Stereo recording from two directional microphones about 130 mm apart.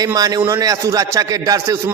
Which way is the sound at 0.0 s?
30° right (ahead or behind).